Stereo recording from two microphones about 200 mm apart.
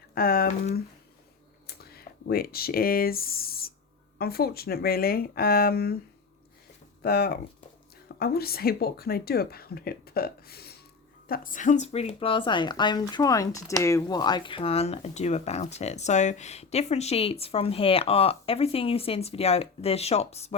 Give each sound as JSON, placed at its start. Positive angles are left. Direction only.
{"t": 0.1, "sound": "speech", "side_deg": 50}
{"t": 7.0, "sound": "speech", "side_deg": 50}